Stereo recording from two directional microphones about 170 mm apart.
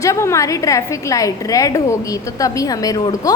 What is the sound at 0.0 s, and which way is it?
A woman's voice, 15° left (ahead or behind).